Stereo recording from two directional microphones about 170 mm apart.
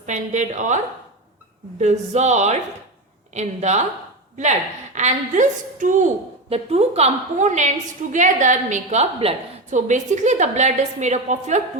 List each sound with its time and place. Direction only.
0.0 s a woman's voice: 45° right (ahead or behind)
1.8 s a woman's voice: 40° right (ahead or behind)